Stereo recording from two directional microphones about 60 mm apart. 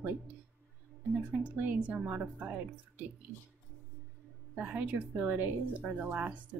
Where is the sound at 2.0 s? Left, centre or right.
Right.